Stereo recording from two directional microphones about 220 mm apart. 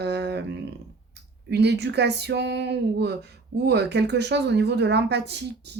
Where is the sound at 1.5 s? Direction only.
50° right (ahead or behind).